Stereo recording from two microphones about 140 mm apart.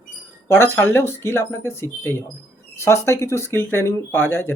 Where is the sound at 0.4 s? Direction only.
15° left (ahead or behind).